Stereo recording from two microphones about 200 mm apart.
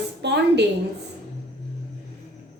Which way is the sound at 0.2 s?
60° right (ahead or behind).